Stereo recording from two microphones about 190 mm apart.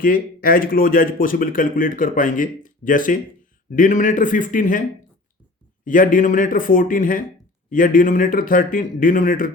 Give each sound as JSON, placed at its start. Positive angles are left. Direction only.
{"t": 0.0, "sound": "speech", "side_deg": 50}
{"t": 5.8, "sound": "speech", "side_deg": 45}